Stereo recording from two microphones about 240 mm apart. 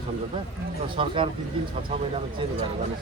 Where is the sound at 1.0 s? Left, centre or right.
Right.